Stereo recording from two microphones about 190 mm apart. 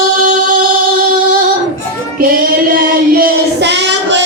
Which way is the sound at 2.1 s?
50° right (ahead or behind).